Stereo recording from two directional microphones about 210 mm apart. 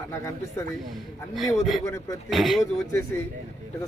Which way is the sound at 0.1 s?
10° left (ahead or behind).